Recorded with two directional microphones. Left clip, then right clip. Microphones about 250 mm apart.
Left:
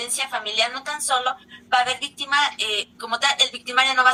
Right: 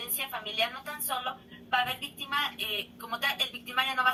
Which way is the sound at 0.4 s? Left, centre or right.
Left.